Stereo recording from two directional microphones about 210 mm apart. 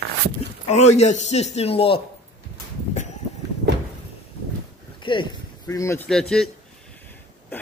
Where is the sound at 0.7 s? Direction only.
30° left (ahead or behind).